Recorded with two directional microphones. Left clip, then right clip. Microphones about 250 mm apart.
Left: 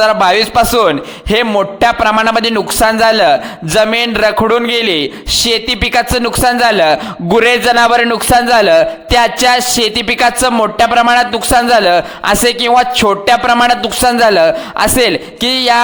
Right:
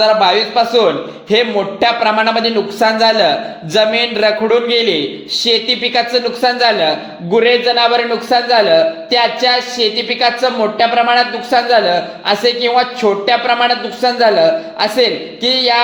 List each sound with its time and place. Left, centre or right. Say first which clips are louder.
0.0 s a man's voice: left 2 dB; left